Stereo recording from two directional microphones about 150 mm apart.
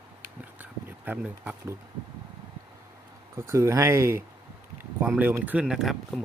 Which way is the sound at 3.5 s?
20° right (ahead or behind).